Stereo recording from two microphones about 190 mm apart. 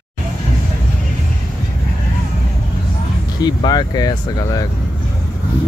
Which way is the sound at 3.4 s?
20° left (ahead or behind).